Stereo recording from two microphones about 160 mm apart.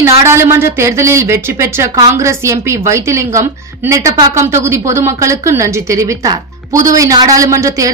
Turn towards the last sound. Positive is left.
turn(degrees=-20)  # may be behind; listen again after turning